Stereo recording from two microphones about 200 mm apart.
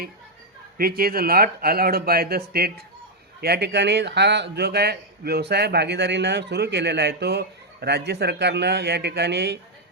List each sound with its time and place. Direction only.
0.8 s a man's voice: 50° right (ahead or behind)